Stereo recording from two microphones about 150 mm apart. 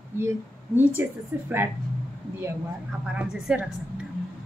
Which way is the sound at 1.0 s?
15° right (ahead or behind).